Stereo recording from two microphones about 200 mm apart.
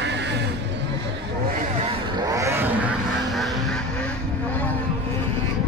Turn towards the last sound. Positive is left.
turn(degrees=0)  # may be behind; listen again after turning